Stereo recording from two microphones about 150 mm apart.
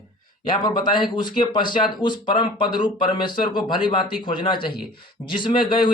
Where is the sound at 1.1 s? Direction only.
30° left (ahead or behind).